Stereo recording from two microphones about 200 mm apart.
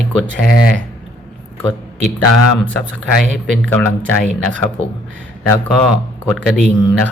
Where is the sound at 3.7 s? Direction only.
5° left (ahead or behind).